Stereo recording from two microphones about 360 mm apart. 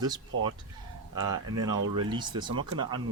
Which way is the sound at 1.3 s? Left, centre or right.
Right.